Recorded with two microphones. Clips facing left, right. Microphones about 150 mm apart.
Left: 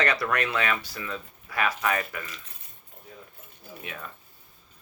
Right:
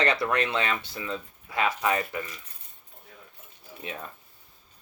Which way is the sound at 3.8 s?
30° right (ahead or behind).